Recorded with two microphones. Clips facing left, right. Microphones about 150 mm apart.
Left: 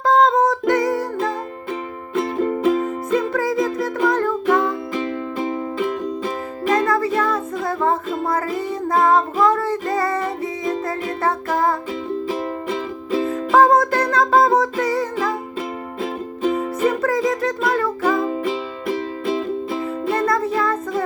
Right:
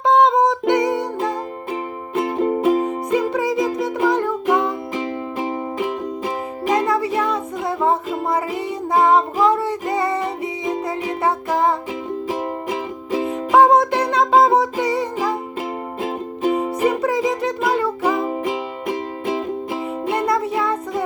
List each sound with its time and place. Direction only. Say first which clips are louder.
0.0 s music: right 1 dB; 20° right (ahead or behind)
2.1 s music: right 1 dB; 15° right (ahead or behind)